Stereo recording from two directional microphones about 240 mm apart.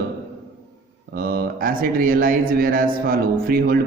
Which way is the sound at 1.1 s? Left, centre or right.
Right.